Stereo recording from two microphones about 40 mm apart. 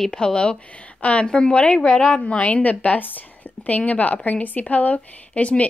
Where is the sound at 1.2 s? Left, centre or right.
Left.